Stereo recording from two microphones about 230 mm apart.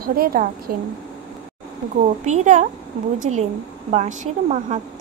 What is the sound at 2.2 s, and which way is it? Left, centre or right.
A woman's voice, right.